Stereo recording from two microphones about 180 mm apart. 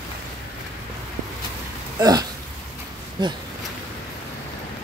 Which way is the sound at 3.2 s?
25° right (ahead or behind).